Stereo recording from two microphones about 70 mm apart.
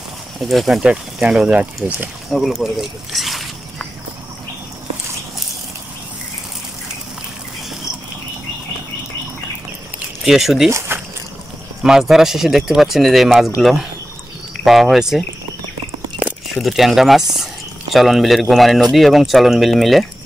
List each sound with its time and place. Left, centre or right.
0.4 s speech: centre
0.8 s speech: centre
2.6 s speech: centre
10.2 s speech: centre
10.7 s a sound: right
11.8 s speech: centre
14.6 s speech: centre
16.2 s a sound: centre
16.5 s speech: centre